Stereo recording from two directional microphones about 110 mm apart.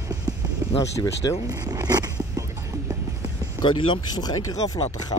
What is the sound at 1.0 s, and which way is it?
Speech, 35° left (ahead or behind).